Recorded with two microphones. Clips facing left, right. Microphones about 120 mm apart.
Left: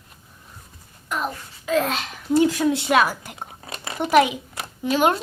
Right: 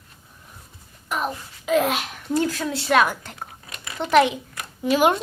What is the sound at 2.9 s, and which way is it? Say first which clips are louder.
Speech: right 5 dB; 5° left (ahead or behind).